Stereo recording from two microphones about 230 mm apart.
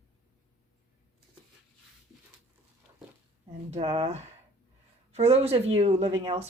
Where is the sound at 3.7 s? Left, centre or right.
Right.